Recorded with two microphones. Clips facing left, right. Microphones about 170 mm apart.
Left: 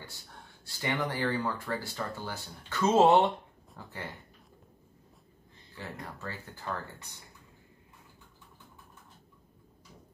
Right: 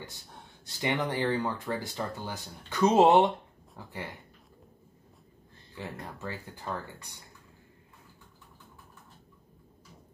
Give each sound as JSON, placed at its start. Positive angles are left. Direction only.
{"t": 0.7, "sound": "speech", "side_deg": -20}
{"t": 5.8, "sound": "speech", "side_deg": -15}